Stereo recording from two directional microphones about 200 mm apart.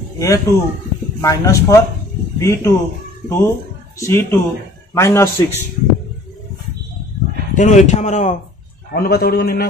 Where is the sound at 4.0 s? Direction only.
15° left (ahead or behind).